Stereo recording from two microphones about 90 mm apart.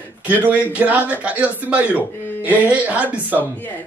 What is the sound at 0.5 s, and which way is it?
A man's voice, 15° right (ahead or behind).